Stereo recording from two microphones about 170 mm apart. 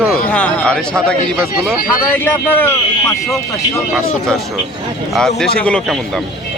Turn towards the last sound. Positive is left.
turn(degrees=5)  # may be behind; listen again after turning